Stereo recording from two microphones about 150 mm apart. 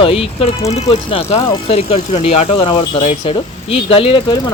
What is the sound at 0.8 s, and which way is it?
Speech, 30° left (ahead or behind).